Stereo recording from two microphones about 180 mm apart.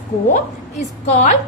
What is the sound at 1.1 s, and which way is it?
Speech, 40° left (ahead or behind).